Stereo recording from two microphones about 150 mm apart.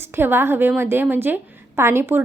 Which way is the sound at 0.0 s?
15° right (ahead or behind).